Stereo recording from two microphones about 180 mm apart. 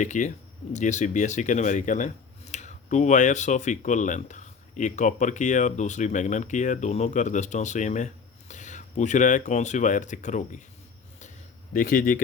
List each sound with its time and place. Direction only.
0.0 s speech: 40° left (ahead or behind)
11.7 s speech: 50° left (ahead or behind)